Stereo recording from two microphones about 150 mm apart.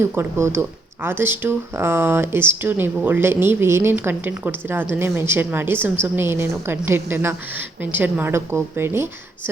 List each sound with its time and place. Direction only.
0.0 s speech: 15° right (ahead or behind)